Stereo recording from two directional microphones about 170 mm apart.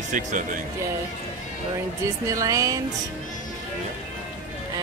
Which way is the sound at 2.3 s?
20° right (ahead or behind).